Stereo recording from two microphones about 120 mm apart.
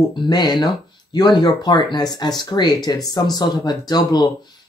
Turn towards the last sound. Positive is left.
turn(degrees=35)  # may be behind; listen again after turning